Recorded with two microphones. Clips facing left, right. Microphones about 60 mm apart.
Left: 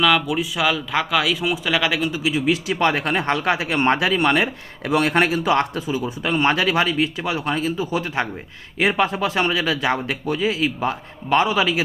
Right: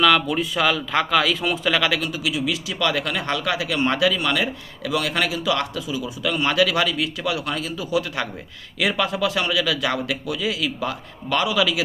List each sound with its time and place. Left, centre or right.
0.0 s speech: centre; by 11.8 s left